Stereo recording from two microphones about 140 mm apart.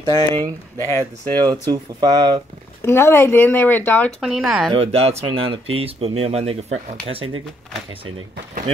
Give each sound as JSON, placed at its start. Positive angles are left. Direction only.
{"t": 0.0, "sound": "speech", "side_deg": -30}
{"t": 2.8, "sound": "speech", "side_deg": 15}
{"t": 4.2, "sound": "speech", "side_deg": -5}
{"t": 4.6, "sound": "speech", "side_deg": -45}